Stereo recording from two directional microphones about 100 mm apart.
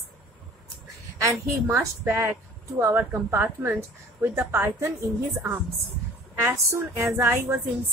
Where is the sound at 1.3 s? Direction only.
30° right (ahead or behind).